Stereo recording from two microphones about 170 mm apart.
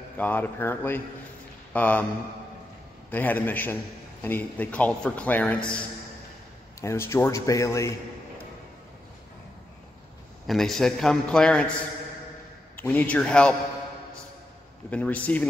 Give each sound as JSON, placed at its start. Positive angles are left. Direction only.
{"t": 0.2, "sound": "a man's voice", "side_deg": 10}
{"t": 3.1, "sound": "a man's voice", "side_deg": 10}
{"t": 6.8, "sound": "a man's voice", "side_deg": 15}
{"t": 10.4, "sound": "a man's voice", "side_deg": 0}
{"t": 12.7, "sound": "a man's voice", "side_deg": 10}
{"t": 14.9, "sound": "a man's voice", "side_deg": 10}